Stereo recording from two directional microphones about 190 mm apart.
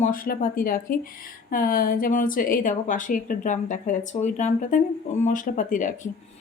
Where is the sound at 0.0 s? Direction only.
45° left (ahead or behind).